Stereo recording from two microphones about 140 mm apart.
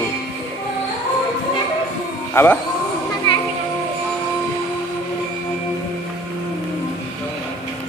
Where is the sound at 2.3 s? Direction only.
15° left (ahead or behind).